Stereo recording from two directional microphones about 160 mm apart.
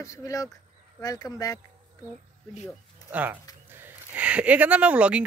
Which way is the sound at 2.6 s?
10° right (ahead or behind).